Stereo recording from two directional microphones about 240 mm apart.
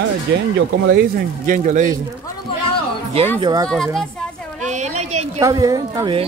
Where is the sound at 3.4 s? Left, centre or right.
Centre.